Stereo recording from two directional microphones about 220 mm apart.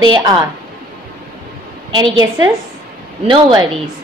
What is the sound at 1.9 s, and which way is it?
A woman's voice, 20° right (ahead or behind).